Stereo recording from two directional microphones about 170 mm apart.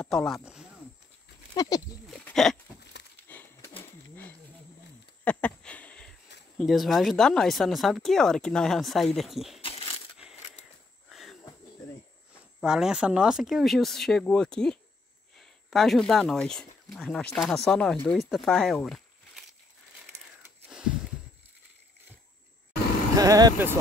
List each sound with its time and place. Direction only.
0.0 s speech: 5° left (ahead or behind)
1.5 s speech: 20° left (ahead or behind)
2.0 s a sound: 5° left (ahead or behind)
2.9 s a sound: 85° left
3.3 s a sound: 10° left (ahead or behind)
6.6 s speech: centre (ahead or behind)
9.6 s coin: 35° left (ahead or behind)
11.1 s cricket: centre (ahead or behind)
12.5 s speech: 5° right (ahead or behind)
23.1 s speech: 20° right (ahead or behind)